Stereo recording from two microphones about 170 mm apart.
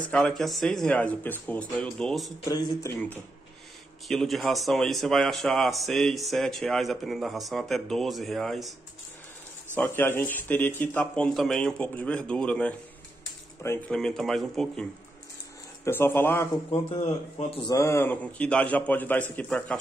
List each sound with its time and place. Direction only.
0.1 s speech: centre (ahead or behind)
2.4 s speech: 20° left (ahead or behind)
4.1 s speech: centre (ahead or behind)
9.8 s speech: 10° left (ahead or behind)
15.8 s speech: 15° left (ahead or behind)
16.9 s speech: 35° left (ahead or behind)
17.6 s speech: 20° left (ahead or behind)